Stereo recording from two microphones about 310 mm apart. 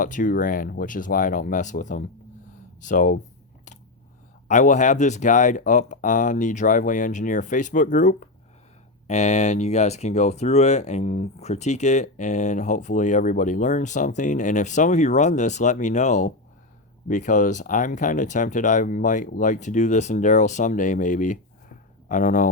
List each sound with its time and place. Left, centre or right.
0.0 s speech: left
4.4 s speech: left